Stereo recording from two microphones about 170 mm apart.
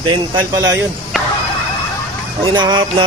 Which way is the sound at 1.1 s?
Centre (ahead or behind).